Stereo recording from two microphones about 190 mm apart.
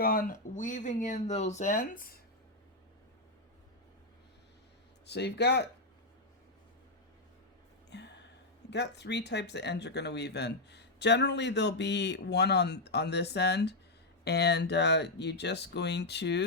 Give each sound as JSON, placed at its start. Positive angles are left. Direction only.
{"t": 0.0, "sound": "speech", "side_deg": 50}
{"t": 5.0, "sound": "speech", "side_deg": 60}
{"t": 7.9, "sound": "a sound", "side_deg": 65}
{"t": 8.7, "sound": "speech", "side_deg": 65}